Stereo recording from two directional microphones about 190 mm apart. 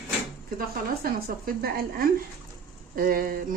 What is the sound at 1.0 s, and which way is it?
Speech, 50° right (ahead or behind).